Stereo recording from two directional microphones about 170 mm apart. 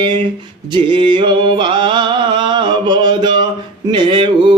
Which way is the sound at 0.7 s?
30° right (ahead or behind).